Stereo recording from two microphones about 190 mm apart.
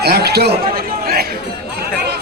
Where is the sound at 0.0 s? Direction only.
60° right (ahead or behind).